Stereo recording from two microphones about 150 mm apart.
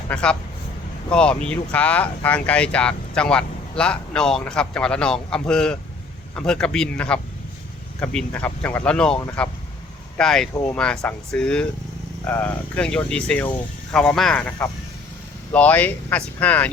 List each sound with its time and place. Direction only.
0.1 s speech: 5° left (ahead or behind)
10.5 s speech: 15° left (ahead or behind)
10.8 s speech: 5° left (ahead or behind)
15.5 s speech: 10° left (ahead or behind)